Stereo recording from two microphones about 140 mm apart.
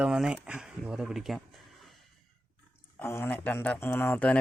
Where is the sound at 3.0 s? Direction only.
15° left (ahead or behind).